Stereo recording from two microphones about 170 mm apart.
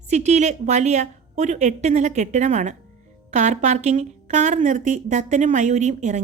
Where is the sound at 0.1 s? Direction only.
45° right (ahead or behind).